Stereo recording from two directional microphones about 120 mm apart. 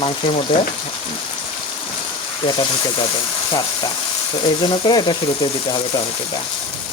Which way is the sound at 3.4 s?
40° left (ahead or behind).